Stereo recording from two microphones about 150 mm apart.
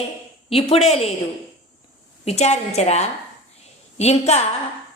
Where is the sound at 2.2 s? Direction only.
45° left (ahead or behind).